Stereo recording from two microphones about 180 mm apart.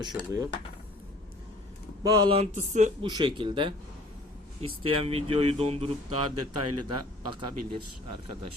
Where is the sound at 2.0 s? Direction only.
20° right (ahead or behind).